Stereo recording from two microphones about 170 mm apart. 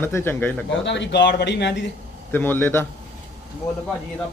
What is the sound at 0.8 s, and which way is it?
Speech, 90° left.